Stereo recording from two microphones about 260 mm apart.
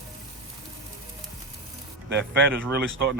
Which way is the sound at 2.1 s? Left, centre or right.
Right.